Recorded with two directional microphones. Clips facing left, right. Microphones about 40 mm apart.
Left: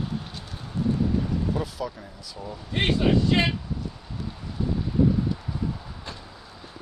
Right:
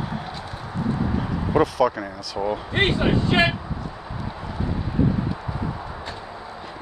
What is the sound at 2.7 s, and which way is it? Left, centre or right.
Speech, right.